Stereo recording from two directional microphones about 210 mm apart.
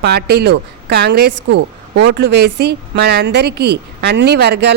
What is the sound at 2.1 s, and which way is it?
A woman's voice, 50° right (ahead or behind).